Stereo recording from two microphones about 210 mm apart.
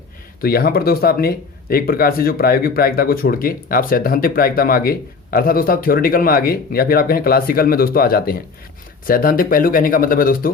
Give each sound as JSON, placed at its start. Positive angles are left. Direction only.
{"t": 0.4, "sound": "speech", "side_deg": 45}